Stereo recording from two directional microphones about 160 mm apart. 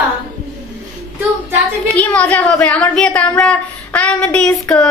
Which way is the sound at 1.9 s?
10° left (ahead or behind).